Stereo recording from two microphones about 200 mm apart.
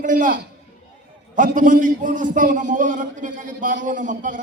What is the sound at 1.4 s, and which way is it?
A man's voice, 40° right (ahead or behind).